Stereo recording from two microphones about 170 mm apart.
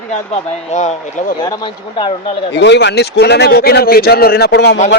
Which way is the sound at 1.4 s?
25° left (ahead or behind).